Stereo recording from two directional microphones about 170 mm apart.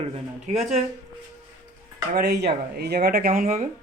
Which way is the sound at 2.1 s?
70° right (ahead or behind).